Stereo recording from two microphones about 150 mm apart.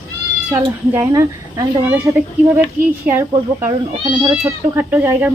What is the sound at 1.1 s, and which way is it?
Speech, 25° right (ahead or behind).